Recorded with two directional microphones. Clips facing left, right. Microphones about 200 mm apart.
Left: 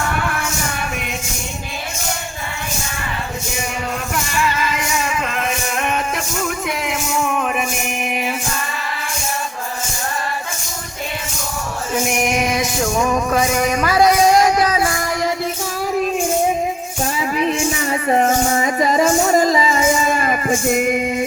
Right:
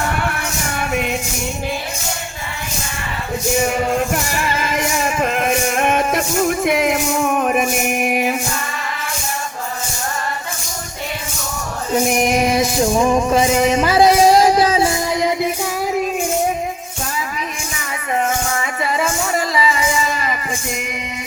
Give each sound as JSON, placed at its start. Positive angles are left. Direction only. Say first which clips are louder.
{"t": 4.1, "sound": "music", "louder": "even", "side_deg": -55}
{"t": 11.9, "sound": "music", "louder": "right 3 dB", "side_deg": -35}
{"t": 17.2, "sound": "a sound", "louder": "left 10 dB", "side_deg": 30}